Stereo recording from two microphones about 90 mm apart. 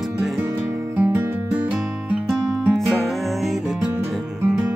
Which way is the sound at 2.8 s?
Centre (ahead or behind).